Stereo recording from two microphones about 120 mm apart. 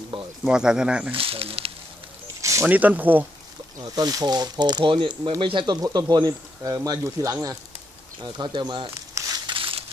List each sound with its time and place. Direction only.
0.4 s speech: 5° right (ahead or behind)
1.1 s speech: 50° right (ahead or behind)
2.6 s speech: 10° right (ahead or behind)
3.9 s speech: 30° right (ahead or behind)
8.2 s speech: 40° right (ahead or behind)
9.2 s crumpling: 25° right (ahead or behind)
9.5 s crumpling: 50° right (ahead or behind)